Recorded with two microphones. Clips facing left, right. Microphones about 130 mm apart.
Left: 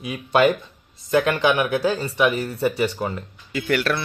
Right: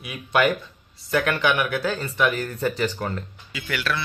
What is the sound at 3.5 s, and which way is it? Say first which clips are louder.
Speech: left 6 dB; 50° left (ahead or behind).